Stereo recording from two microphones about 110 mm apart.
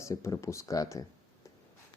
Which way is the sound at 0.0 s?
25° left (ahead or behind).